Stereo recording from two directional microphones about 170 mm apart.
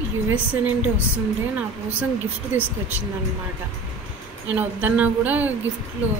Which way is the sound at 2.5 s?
15° right (ahead or behind).